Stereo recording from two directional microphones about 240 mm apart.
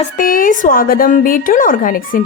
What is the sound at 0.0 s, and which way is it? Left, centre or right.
A woman's voice, left.